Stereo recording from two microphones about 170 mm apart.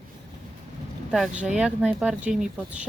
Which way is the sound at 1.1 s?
5° right (ahead or behind).